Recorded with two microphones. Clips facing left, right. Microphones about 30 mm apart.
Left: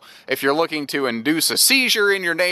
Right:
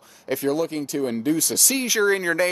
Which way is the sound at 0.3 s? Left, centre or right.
Left.